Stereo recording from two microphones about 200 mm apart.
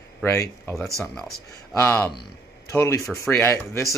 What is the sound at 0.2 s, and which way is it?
Speech, 15° left (ahead or behind).